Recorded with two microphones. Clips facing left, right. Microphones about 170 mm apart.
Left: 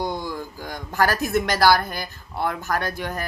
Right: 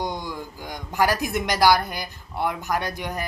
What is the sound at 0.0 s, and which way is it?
A woman's voice, 15° right (ahead or behind).